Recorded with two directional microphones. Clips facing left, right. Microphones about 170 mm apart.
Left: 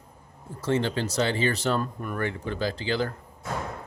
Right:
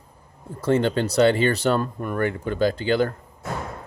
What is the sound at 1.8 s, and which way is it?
Speech, 45° right (ahead or behind).